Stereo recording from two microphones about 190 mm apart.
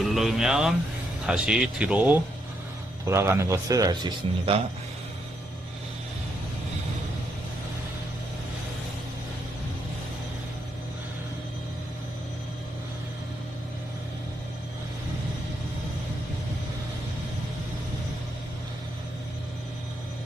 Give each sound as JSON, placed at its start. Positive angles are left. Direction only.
{"t": 0.1, "sound": "a man's voice", "side_deg": 0}